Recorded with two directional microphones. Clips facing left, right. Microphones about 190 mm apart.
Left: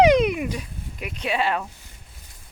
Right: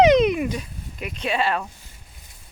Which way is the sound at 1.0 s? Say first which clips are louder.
Right 1 dB; 10° left (ahead or behind).